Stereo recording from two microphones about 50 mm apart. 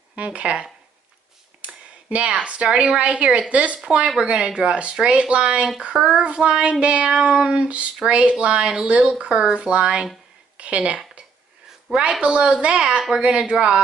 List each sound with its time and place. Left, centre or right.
0.1 s speech: right
3.8 s child singing: right
10.6 s a woman's voice: right
12.0 s child singing: right
13.1 s speech: centre